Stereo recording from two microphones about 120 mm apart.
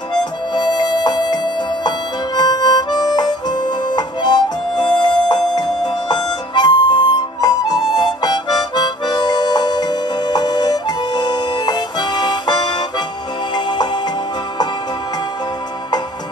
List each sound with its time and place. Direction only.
0.2 s harmonica: 35° left (ahead or behind)